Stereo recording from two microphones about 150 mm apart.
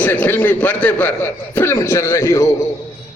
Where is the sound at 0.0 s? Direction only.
15° left (ahead or behind).